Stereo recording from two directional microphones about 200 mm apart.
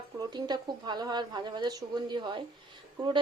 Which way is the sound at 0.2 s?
20° right (ahead or behind).